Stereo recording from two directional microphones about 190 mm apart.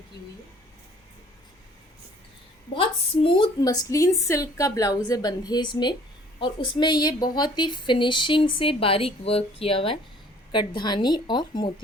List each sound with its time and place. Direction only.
2.7 s a woman's voice: 25° left (ahead or behind)